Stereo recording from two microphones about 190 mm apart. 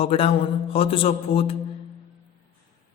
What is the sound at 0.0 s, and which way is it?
Speech, 30° left (ahead or behind).